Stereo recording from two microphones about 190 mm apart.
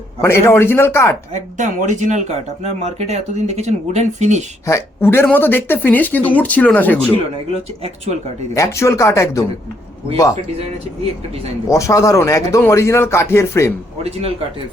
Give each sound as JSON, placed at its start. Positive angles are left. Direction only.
{"t": 0.2, "sound": "speech", "side_deg": 15}
{"t": 1.3, "sound": "speech", "side_deg": -40}
{"t": 4.6, "sound": "speech", "side_deg": 15}
{"t": 8.5, "sound": "speech", "side_deg": 15}
{"t": 11.7, "sound": "speech", "side_deg": 15}
{"t": 14.0, "sound": "speech", "side_deg": -30}